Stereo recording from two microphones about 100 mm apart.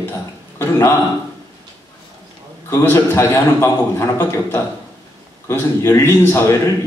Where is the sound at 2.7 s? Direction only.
25° left (ahead or behind).